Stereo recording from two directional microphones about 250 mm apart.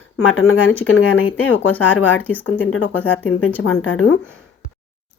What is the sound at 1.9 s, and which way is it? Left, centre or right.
A woman's voice, left.